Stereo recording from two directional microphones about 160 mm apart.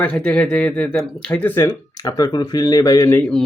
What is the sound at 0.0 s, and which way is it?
Speech, 5° left (ahead or behind).